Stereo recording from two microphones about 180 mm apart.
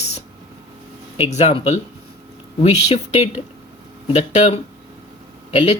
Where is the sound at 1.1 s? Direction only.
40° left (ahead or behind).